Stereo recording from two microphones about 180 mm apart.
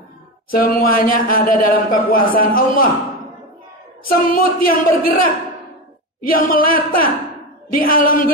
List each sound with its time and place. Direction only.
0.5 s a man's voice: 55° left (ahead or behind)
4.0 s a man's voice: 55° left (ahead or behind)